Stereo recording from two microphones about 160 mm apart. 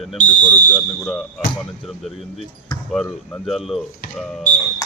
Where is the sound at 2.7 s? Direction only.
25° left (ahead or behind).